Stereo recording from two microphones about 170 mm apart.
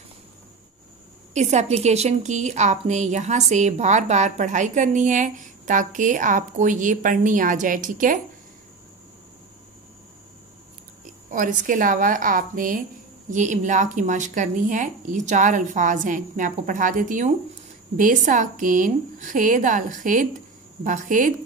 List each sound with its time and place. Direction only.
1.3 s a woman's voice: 40° right (ahead or behind)
11.2 s a woman's voice: 50° right (ahead or behind)